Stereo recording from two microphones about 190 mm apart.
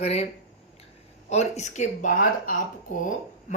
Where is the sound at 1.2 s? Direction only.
35° left (ahead or behind).